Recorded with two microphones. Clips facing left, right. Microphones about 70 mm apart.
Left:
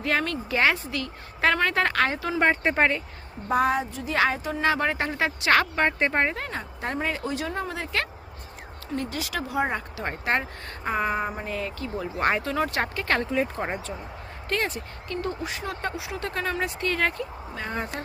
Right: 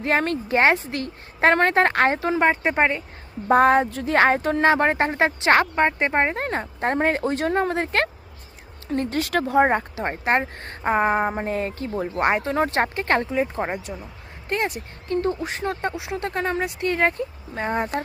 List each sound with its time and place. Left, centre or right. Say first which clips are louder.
0.0 s speech: right 4 dB; right
2.4 s speech: right 1 dB; centre
3.5 s speech: right 7 dB; right
4.6 s speech: right 4 dB; right
5.7 s speech: right 3 dB; centre
6.3 s speech: right 6 dB; right
9.9 s speech: right 4 dB; right
12.2 s speech: right 3 dB; right
14.5 s speech: right 3 dB; right
15.0 s speech: right 7 dB; right